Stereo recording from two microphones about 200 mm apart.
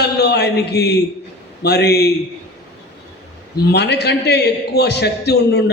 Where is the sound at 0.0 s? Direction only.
55° left (ahead or behind).